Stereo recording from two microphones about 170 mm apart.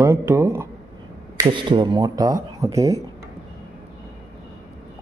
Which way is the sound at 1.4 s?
30° right (ahead or behind).